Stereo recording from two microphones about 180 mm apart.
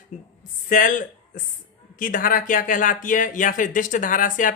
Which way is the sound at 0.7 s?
45° left (ahead or behind).